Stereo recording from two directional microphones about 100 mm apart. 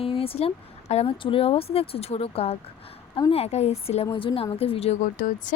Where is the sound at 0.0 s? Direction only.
70° left (ahead or behind).